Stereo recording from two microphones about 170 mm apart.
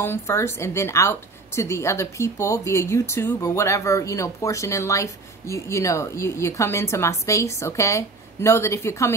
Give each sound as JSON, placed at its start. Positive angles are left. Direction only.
{"t": 0.0, "sound": "a woman's voice", "side_deg": 15}